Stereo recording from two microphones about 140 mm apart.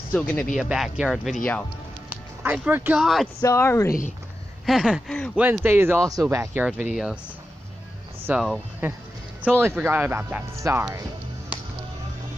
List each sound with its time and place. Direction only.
0.1 s speech: 10° left (ahead or behind)
0.6 s speech: 5° right (ahead or behind)
2.0 s music: 10° right (ahead or behind)
3.0 s speech: centre (ahead or behind)
3.3 s speech: 20° left (ahead or behind)
4.6 s speech: 5° right (ahead or behind)
8.3 s speech: 10° right (ahead or behind)